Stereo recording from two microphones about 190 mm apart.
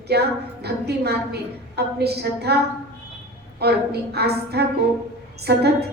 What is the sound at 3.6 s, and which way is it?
A woman's voice, 60° right (ahead or behind).